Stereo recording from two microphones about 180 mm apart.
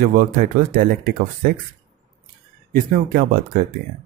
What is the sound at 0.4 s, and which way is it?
Speech, 50° right (ahead or behind).